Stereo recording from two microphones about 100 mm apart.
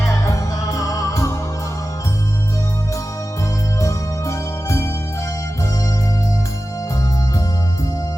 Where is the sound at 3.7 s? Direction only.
30° left (ahead or behind).